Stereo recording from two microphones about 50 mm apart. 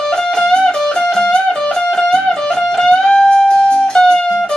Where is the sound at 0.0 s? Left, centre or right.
Centre.